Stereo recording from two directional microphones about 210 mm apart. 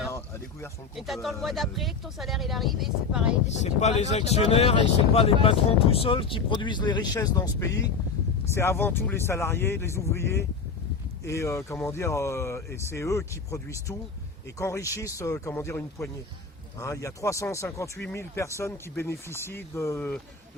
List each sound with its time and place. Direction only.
0.9 s speech: centre (ahead or behind)
3.5 s speech: 35° left (ahead or behind); by 20.2 s 5° left (ahead or behind)